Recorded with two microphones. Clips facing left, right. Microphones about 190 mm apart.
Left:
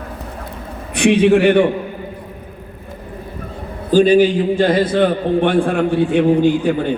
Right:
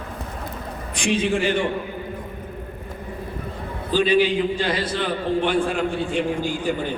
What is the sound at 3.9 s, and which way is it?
A man's voice, 45° left (ahead or behind).